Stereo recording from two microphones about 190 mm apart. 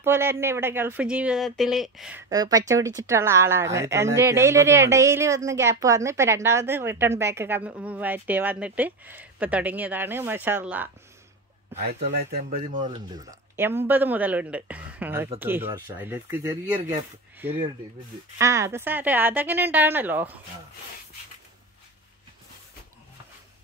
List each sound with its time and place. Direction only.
0.0 s speech: 10° right (ahead or behind)
11.8 s speech: 35° right (ahead or behind)
12.8 s speech: 25° right (ahead or behind)
13.6 s speech: 10° right (ahead or behind)